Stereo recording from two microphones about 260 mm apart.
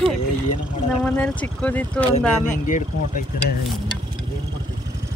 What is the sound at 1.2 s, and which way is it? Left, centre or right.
Speech, centre.